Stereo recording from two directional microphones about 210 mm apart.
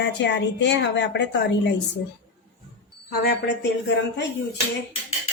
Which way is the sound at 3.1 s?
50° left (ahead or behind).